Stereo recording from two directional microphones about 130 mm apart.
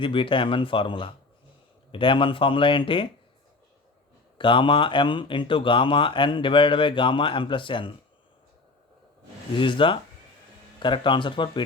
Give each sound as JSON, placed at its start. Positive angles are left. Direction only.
{"t": 0.0, "sound": "speech", "side_deg": 40}
{"t": 4.4, "sound": "speech", "side_deg": 40}
{"t": 9.6, "sound": "speech", "side_deg": 40}